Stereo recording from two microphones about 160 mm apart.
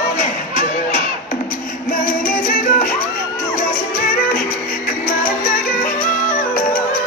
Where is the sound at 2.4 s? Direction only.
60° left (ahead or behind).